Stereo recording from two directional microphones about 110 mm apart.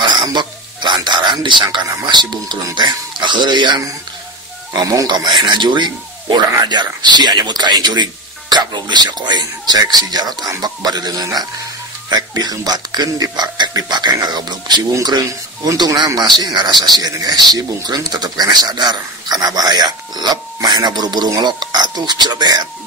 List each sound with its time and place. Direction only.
0.0 s speech: 45° right (ahead or behind)